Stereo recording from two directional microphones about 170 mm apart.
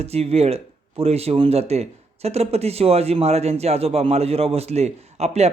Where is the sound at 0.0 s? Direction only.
35° right (ahead or behind).